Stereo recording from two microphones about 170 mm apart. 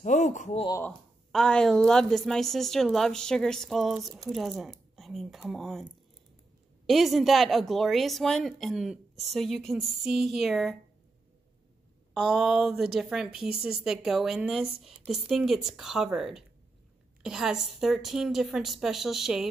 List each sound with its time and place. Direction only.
0.0 s speech: 45° left (ahead or behind)
0.8 s a woman's voice: 5° left (ahead or behind)
6.9 s a woman's voice: centre (ahead or behind)
12.1 s a woman's voice: centre (ahead or behind)